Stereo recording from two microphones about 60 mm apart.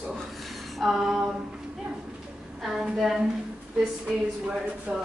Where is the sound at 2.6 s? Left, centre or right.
Centre.